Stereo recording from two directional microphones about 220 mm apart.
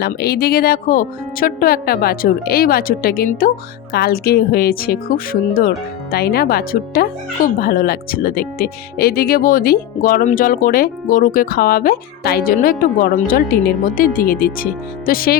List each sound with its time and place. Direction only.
0.0 s speech: 45° left (ahead or behind)